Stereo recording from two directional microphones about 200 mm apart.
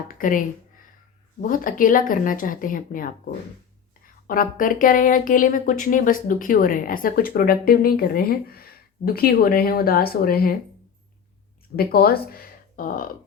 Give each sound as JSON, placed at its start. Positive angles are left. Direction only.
{"t": 0.1, "sound": "speech", "side_deg": 40}
{"t": 4.3, "sound": "speech", "side_deg": 45}
{"t": 11.8, "sound": "speech", "side_deg": 50}